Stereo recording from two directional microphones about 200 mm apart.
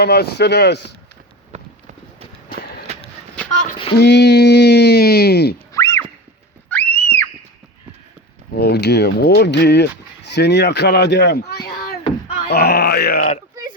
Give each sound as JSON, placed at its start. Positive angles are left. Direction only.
{"t": 0.0, "sound": "speech", "side_deg": 50}
{"t": 1.5, "sound": "run", "side_deg": -35}
{"t": 2.9, "sound": "a sound", "side_deg": -30}
{"t": 3.9, "sound": "speech", "side_deg": 55}
{"t": 5.7, "sound": "a sound", "side_deg": 15}
{"t": 8.5, "sound": "speech", "side_deg": 55}